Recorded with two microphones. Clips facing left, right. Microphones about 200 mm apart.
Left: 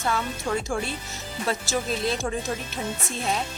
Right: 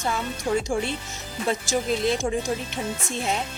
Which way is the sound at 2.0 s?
20° right (ahead or behind).